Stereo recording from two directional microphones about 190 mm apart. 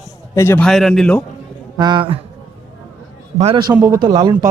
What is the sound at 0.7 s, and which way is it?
Speech, centre (ahead or behind).